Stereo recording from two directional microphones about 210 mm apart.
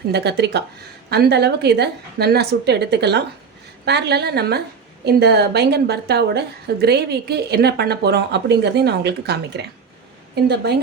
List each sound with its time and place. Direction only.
0.1 s speech: 50° right (ahead or behind)